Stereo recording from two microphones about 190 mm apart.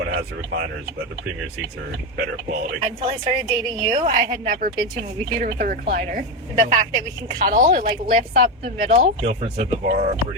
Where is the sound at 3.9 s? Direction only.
35° right (ahead or behind).